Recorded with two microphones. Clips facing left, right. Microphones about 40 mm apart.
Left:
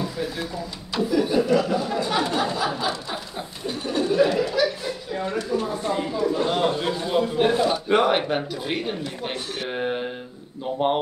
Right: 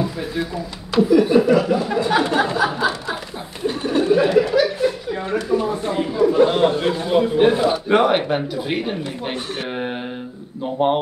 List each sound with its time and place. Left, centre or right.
1.1 s speech: centre; by 2.6 s right
2.6 s speech: right
3.6 s a sound: right
4.5 s chuckle: right
5.9 s a man's voice: right; by 11.0 s centre